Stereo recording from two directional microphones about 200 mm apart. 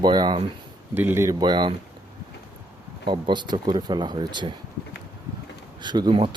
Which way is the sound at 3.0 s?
25° right (ahead or behind).